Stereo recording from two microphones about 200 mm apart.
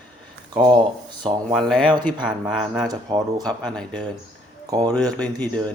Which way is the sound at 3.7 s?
5° left (ahead or behind).